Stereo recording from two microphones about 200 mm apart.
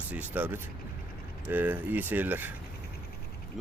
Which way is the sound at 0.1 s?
10° right (ahead or behind).